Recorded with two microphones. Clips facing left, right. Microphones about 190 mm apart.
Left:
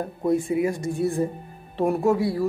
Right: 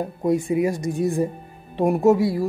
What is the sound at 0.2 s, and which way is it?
Speech, 15° right (ahead or behind).